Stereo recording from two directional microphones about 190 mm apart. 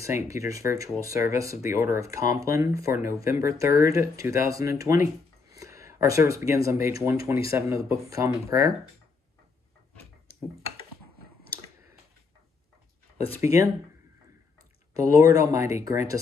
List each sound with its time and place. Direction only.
0.0 s speech: 15° right (ahead or behind)
13.4 s speech: 15° right (ahead or behind)
15.1 s speech: 20° right (ahead or behind)